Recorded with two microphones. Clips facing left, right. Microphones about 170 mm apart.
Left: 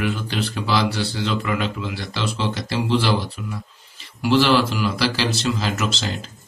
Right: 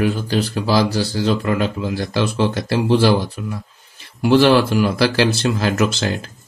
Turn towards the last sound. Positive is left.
turn(degrees=-55)  # may be behind; listen again after turning